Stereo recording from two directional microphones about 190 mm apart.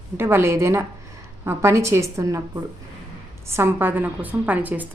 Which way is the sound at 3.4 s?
15° right (ahead or behind).